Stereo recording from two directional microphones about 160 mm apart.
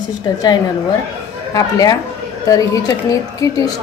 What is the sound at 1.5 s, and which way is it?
A woman's voice, 20° left (ahead or behind).